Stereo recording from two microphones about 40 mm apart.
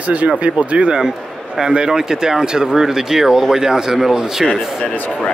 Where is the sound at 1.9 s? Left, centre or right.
Centre.